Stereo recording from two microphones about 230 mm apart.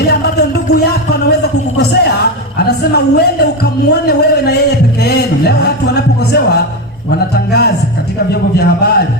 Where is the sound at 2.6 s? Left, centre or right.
Left.